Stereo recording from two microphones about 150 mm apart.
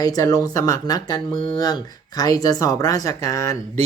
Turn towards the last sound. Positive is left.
turn(degrees=20)  # may be behind; listen again after turning